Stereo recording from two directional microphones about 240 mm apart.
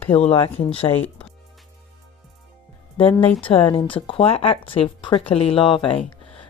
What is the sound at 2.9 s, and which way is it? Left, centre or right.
Speech, left.